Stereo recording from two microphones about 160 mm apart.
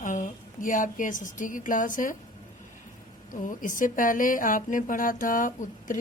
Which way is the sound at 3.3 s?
55° left (ahead or behind).